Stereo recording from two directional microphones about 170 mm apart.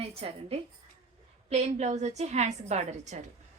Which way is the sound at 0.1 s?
35° right (ahead or behind).